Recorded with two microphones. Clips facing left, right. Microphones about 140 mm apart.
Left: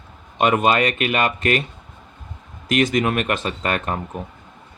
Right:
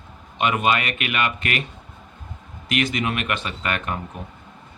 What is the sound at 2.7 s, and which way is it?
Speech, 40° left (ahead or behind).